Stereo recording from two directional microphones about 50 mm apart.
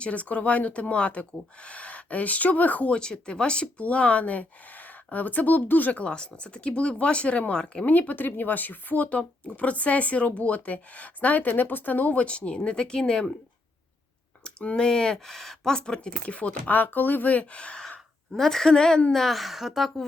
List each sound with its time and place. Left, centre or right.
0.0 s speech: left
2.9 s speech: centre
7.9 s speech: left; by 13.3 s centre
14.8 s speech: centre
18.3 s a woman's voice: centre
19.1 s a woman's voice: centre